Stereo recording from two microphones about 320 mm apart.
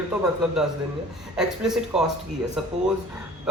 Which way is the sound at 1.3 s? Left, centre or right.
Centre.